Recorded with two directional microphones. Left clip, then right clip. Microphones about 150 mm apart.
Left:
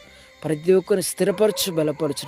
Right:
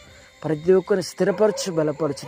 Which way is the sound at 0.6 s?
20° left (ahead or behind).